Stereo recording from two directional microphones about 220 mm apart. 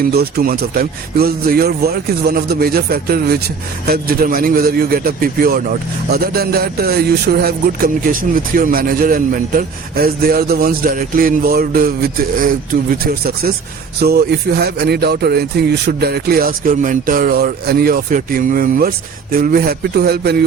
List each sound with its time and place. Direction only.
0.0 s a man's voice: 45° right (ahead or behind)